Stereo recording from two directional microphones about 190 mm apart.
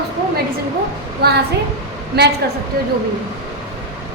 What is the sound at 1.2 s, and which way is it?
A woman's voice, 55° right (ahead or behind).